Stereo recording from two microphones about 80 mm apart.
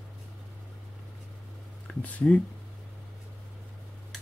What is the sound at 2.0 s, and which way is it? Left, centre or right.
Speech, centre.